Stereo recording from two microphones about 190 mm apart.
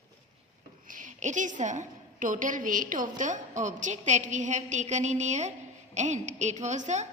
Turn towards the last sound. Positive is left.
turn(degrees=-40)  # may be behind; listen again after turning